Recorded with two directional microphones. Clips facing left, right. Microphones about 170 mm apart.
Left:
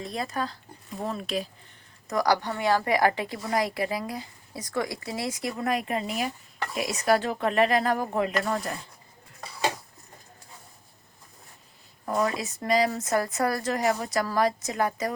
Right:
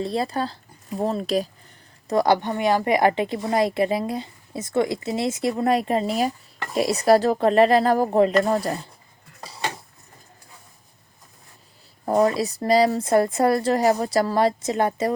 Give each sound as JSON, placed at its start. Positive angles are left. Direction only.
{"t": 0.0, "sound": "a woman's voice", "side_deg": -30}
{"t": 2.0, "sound": "a woman's voice", "side_deg": -25}
{"t": 12.0, "sound": "a woman's voice", "side_deg": -35}